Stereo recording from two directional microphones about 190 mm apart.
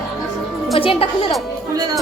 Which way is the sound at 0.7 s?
30° left (ahead or behind).